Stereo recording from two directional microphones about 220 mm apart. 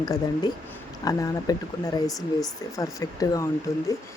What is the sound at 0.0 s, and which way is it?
Speech, 20° left (ahead or behind).